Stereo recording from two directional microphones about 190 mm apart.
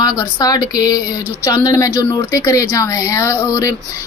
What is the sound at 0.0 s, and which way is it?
A woman's voice, 20° left (ahead or behind).